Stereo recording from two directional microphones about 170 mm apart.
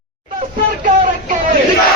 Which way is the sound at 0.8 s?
50° right (ahead or behind).